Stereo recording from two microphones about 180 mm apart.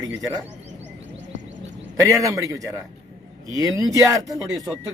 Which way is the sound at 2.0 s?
20° right (ahead or behind).